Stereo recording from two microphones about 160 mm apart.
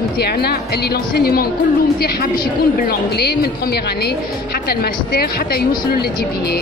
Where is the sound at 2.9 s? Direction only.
90° left.